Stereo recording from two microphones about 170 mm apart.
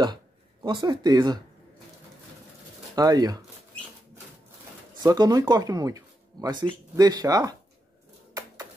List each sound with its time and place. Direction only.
0.0 s speech: 25° right (ahead or behind)
3.0 s speech: 20° right (ahead or behind)
5.0 s speech: 20° right (ahead or behind)